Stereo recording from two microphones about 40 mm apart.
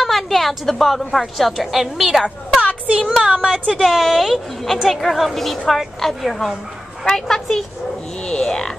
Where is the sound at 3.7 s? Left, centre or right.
Centre.